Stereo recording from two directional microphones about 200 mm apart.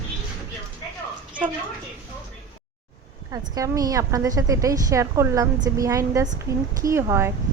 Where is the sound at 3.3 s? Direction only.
20° right (ahead or behind).